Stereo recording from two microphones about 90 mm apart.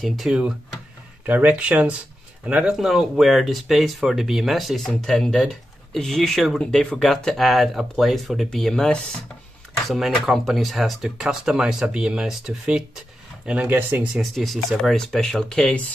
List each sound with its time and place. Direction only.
0.0 s speech: centre (ahead or behind)
1.2 s speech: 20° right (ahead or behind)
2.7 s speech: centre (ahead or behind)
13.5 s speech: 20° right (ahead or behind)
14.2 s speech: centre (ahead or behind)